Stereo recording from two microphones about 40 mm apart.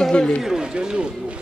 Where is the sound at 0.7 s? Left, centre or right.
Right.